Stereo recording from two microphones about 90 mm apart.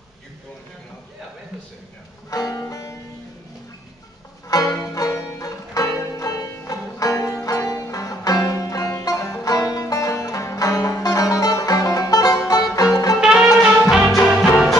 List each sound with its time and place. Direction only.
2.3 s music: 40° left (ahead or behind)
4.5 s music: 40° left (ahead or behind)
13.2 s music: 5° right (ahead or behind)